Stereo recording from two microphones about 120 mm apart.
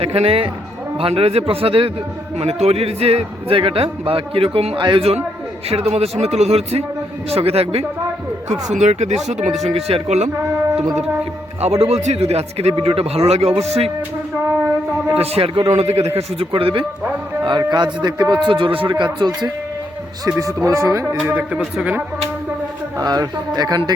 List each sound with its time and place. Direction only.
0.0 s a man's voice: 55° right (ahead or behind)
8.7 s speech: 70° right (ahead or behind)
9.6 s speech: 55° right (ahead or behind)
11.8 s speech: 65° right (ahead or behind)
15.2 s speech: 55° right (ahead or behind)
17.4 s a man's voice: 40° right (ahead or behind)
18.4 s a man's voice: 45° right (ahead or behind)
20.3 s a man's voice: 25° right (ahead or behind)
23.0 s a man's voice: 30° right (ahead or behind)